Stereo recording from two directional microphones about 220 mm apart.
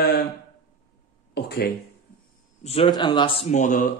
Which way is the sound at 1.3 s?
45° left (ahead or behind).